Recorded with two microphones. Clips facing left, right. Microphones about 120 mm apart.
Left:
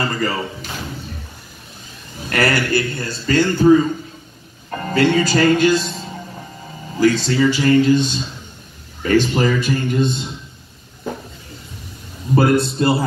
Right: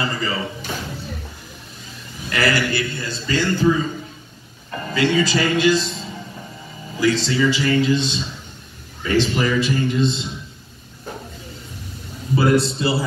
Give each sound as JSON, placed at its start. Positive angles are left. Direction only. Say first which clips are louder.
{"t": 0.0, "sound": "a man's voice", "louder": "left 3 dB", "side_deg": 45}
{"t": 2.2, "sound": "a man's voice", "louder": "left 2 dB", "side_deg": 45}
{"t": 7.2, "sound": "a man's voice", "louder": "left 4 dB", "side_deg": 45}
{"t": 12.4, "sound": "a man's voice", "louder": "left 2 dB", "side_deg": 55}